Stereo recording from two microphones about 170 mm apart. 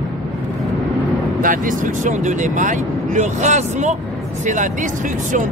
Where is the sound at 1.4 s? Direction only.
50° right (ahead or behind).